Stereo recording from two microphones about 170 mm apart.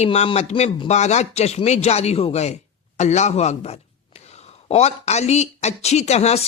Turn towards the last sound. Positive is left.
turn(degrees=40)  # may be behind; listen again after turning